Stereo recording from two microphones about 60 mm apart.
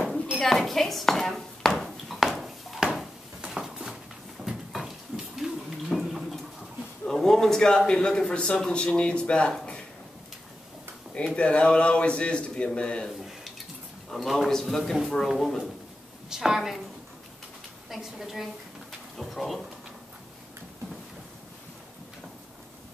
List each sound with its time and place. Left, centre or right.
0.4 s a sound: centre
7.1 s a man's voice: centre
11.3 s a man's voice: centre
14.1 s a woman's voice: centre
17.8 s a woman's voice: centre